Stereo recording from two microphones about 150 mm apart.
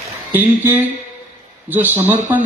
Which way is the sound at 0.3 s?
15° right (ahead or behind).